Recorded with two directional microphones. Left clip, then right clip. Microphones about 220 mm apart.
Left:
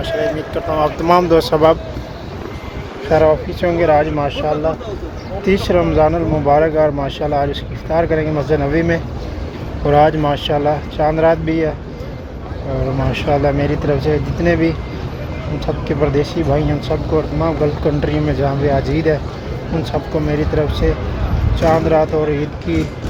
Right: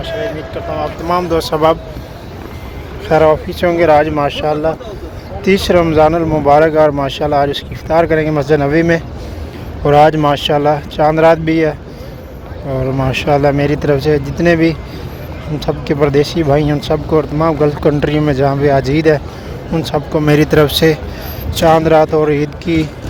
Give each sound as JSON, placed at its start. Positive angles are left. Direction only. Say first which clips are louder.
{"t": 1.3, "sound": "speech", "louder": "left 1 dB", "side_deg": 0}
{"t": 3.1, "sound": "speech", "louder": "right 3 dB", "side_deg": -30}
{"t": 13.0, "sound": "speech", "louder": "right 4 dB", "side_deg": -35}